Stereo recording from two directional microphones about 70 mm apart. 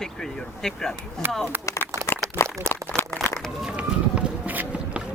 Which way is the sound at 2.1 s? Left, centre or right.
Left.